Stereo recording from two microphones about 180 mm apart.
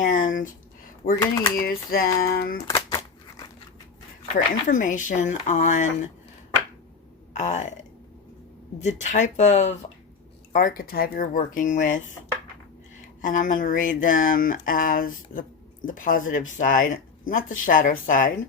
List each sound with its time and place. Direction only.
0.0 s a sound: 45° left (ahead or behind)
1.2 s speech: 20° left (ahead or behind)
1.5 s speech: 55° left (ahead or behind)
2.6 s scissors: 20° left (ahead or behind)
4.6 s speech: 45° left (ahead or behind)
7.3 s speech: 40° left (ahead or behind)
8.8 s speech: 40° left (ahead or behind)
13.2 s speech: 45° left (ahead or behind)